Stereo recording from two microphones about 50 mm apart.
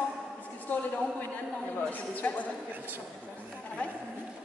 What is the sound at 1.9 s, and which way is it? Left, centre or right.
Speech, left.